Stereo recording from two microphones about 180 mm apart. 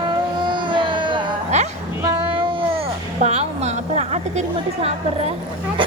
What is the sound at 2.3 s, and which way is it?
Cat, 30° right (ahead or behind).